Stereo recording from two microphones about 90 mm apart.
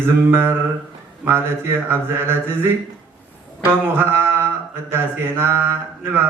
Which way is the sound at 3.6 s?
25° right (ahead or behind).